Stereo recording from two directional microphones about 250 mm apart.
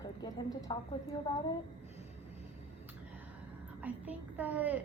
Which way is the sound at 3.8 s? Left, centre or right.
Centre.